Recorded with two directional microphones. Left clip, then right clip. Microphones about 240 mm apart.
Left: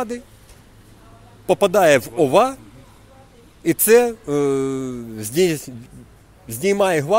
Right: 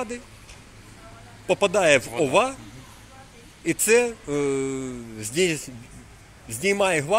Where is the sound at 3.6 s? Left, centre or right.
Left.